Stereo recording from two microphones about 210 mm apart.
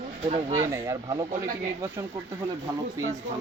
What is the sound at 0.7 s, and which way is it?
Speech, 15° right (ahead or behind).